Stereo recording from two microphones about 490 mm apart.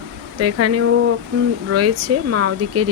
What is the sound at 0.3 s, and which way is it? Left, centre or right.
Speech, right.